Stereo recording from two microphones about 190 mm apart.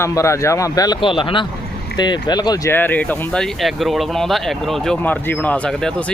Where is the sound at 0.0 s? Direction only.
15° left (ahead or behind).